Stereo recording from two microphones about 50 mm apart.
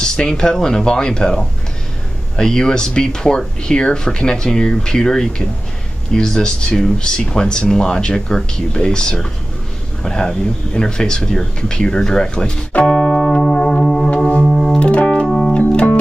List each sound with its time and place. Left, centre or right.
0.0 s speech: centre
13.4 s music: centre
14.4 s music: centre
14.8 s keyboard: left
15.2 s music: centre